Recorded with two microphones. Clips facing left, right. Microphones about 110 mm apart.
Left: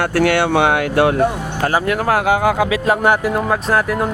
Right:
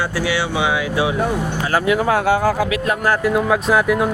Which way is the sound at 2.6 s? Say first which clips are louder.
Left 3 dB; 20° left (ahead or behind).